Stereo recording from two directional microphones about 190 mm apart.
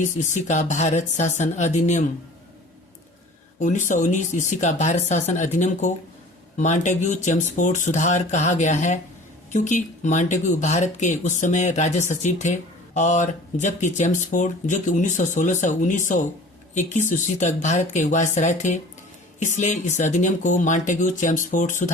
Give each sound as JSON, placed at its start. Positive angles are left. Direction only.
{"t": 0.0, "sound": "speech", "side_deg": 40}
{"t": 3.6, "sound": "speech", "side_deg": 40}